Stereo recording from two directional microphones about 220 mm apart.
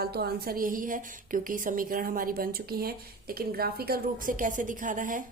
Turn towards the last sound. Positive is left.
turn(degrees=-35)  # may be behind; listen again after turning